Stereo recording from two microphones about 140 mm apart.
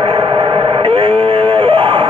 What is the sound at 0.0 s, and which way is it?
Radio, 35° right (ahead or behind).